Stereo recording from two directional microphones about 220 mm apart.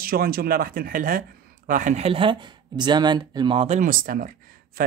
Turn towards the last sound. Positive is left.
turn(degrees=-40)  # may be behind; listen again after turning